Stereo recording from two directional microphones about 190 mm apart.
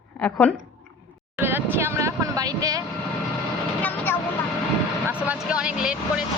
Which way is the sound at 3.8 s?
10° left (ahead or behind).